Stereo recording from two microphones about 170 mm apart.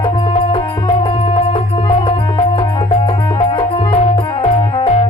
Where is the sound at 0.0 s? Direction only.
30° left (ahead or behind).